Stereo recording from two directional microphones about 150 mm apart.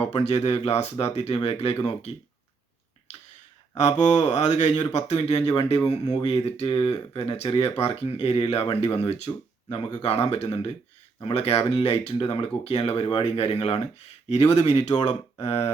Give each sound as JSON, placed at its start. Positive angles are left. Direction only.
{"t": 0.0, "sound": "speech", "side_deg": 45}
{"t": 3.8, "sound": "speech", "side_deg": 50}